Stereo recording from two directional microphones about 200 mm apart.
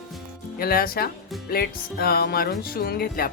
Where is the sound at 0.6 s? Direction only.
50° left (ahead or behind).